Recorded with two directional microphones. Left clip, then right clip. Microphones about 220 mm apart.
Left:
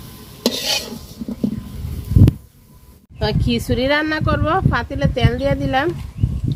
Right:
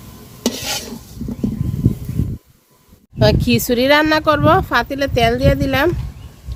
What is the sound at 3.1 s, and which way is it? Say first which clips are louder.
Speech: right 6 dB; 50° right (ahead or behind).